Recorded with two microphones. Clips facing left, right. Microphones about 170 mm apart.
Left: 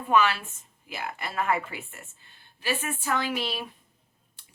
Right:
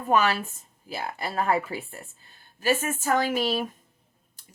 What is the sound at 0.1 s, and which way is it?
Speech, 40° right (ahead or behind).